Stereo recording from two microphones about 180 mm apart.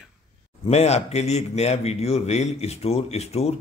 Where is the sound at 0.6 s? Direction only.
35° left (ahead or behind).